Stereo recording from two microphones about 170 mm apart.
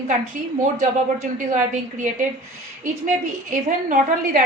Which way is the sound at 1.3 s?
50° right (ahead or behind).